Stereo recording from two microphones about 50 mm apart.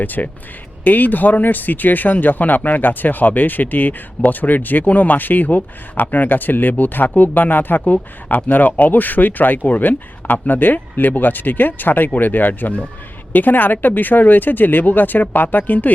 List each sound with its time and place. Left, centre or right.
0.0 s speech: left